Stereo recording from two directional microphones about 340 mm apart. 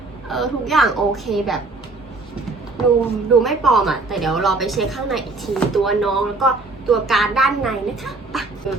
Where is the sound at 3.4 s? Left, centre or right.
Centre.